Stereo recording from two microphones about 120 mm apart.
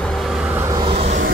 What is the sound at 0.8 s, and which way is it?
Vehicle, 50° right (ahead or behind).